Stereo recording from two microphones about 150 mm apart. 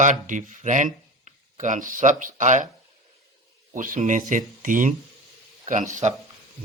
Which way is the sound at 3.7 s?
60° right (ahead or behind).